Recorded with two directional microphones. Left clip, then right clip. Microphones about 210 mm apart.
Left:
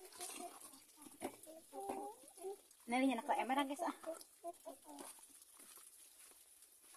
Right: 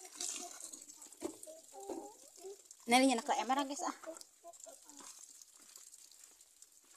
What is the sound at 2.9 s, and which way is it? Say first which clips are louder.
Speech: right 7 dB; 50° right (ahead or behind).